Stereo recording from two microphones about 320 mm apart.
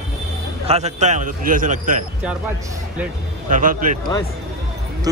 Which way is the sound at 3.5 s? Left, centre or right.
Right.